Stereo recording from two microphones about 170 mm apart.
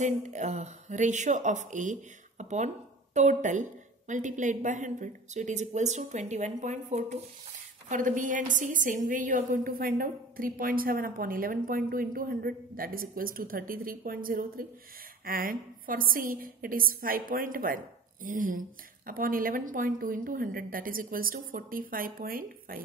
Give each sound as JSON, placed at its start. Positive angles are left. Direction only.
{"t": 0.0, "sound": "a woman's voice", "side_deg": -45}